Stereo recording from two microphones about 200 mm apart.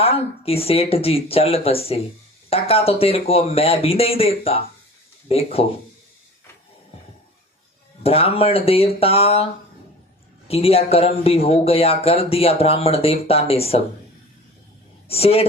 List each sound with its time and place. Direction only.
0.0 s speech: 30° left (ahead or behind)
8.0 s speech: 30° left (ahead or behind)
10.5 s speech: 30° left (ahead or behind)
15.0 s speech: 30° left (ahead or behind)